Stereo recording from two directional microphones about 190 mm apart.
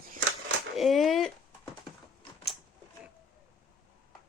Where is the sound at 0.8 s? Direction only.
Centre (ahead or behind).